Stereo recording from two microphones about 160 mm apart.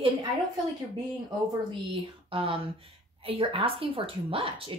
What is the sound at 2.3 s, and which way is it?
A woman's voice, 35° right (ahead or behind).